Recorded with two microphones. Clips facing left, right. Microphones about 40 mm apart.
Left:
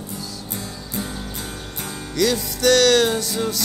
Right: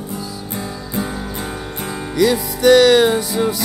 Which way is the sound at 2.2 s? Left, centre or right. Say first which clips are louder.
Right 5 dB; centre.